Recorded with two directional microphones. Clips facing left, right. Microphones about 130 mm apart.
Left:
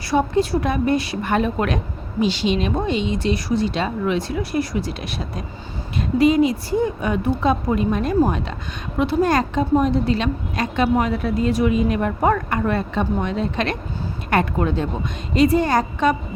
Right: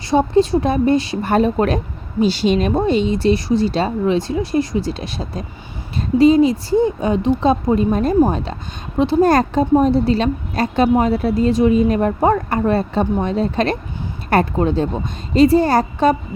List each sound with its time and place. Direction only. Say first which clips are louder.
0.1 s a woman's voice: right 4 dB; 25° right (ahead or behind)